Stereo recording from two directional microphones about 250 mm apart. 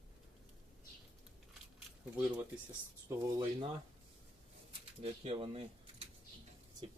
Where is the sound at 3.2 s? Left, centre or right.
Centre.